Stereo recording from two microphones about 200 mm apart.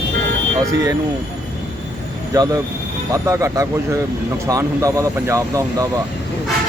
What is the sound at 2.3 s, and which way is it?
Speech, 20° right (ahead or behind).